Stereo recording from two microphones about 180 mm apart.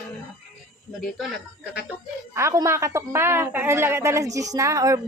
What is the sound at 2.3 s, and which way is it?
A woman's voice, 15° right (ahead or behind).